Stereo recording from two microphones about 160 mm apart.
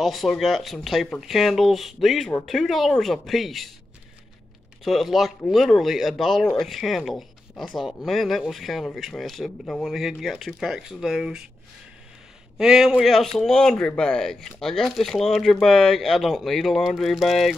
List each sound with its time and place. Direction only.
0.0 s speech: centre (ahead or behind)
4.8 s speech: centre (ahead or behind)
12.5 s speech: 5° right (ahead or behind)